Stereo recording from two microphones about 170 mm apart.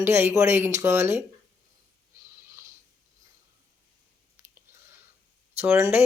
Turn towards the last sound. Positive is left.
turn(degrees=-15)  # may be behind; listen again after turning